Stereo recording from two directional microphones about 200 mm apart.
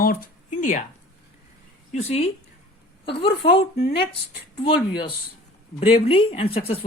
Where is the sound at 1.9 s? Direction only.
35° left (ahead or behind).